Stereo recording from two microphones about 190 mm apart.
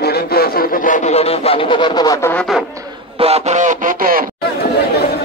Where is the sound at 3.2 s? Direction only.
35° right (ahead or behind).